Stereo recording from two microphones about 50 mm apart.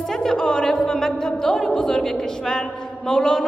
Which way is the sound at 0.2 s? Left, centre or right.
Centre.